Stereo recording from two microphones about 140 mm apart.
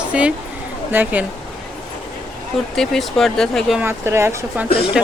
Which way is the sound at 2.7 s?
5° left (ahead or behind).